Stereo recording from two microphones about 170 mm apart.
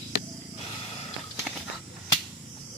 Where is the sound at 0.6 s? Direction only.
35° left (ahead or behind).